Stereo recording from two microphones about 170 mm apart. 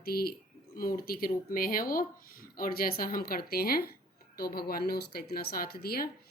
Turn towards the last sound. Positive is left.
turn(degrees=65)  # may be behind; listen again after turning